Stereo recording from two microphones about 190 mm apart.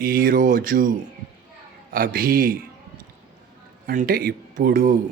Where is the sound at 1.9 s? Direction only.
50° right (ahead or behind).